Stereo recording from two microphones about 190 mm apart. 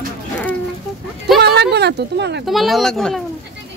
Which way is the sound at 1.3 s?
60° right (ahead or behind).